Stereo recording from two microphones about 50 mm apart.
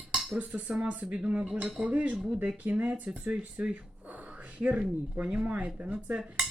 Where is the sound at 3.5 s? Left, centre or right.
Right.